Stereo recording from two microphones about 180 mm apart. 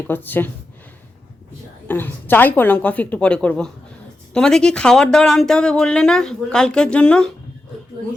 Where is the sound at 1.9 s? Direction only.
10° left (ahead or behind).